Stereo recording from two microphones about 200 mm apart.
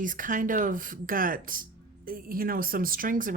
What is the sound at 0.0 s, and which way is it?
Speech, 40° right (ahead or behind).